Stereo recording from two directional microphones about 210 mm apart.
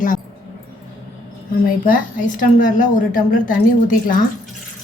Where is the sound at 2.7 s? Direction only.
40° left (ahead or behind).